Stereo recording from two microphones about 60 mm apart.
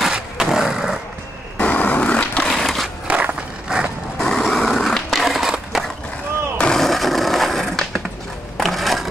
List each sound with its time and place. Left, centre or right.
0.1 s a sound: centre
1.6 s skateboard: left
2.4 s crushing: centre
3.1 s walk: right
3.6 s vehicle: centre
4.2 s a sound: centre
5.5 s crushing: centre
6.6 s a sound: centre
8.5 s skateboard: centre